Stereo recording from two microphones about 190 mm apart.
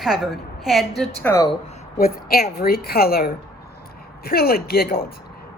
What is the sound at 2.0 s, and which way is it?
A woman's voice, 50° left (ahead or behind).